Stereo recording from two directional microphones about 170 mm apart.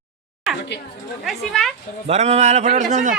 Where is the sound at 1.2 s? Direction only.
Centre (ahead or behind).